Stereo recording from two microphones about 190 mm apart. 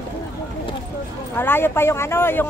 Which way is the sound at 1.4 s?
10° left (ahead or behind).